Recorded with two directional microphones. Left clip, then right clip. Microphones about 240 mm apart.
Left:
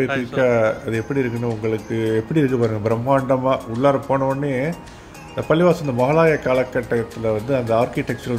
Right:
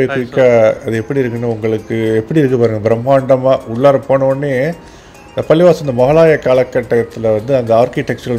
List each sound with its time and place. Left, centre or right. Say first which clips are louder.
0.1 s speech: right 5 dB; centre
0.4 s speech: right 9 dB; centre